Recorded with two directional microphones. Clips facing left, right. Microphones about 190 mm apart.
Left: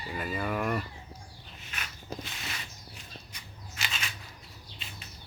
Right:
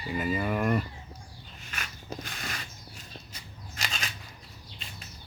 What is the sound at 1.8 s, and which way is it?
Mechanisms, 50° right (ahead or behind).